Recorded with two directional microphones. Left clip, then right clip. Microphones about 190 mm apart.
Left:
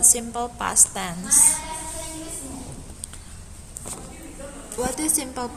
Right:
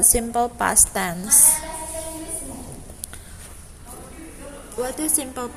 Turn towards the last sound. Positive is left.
turn(degrees=-5)  # may be behind; listen again after turning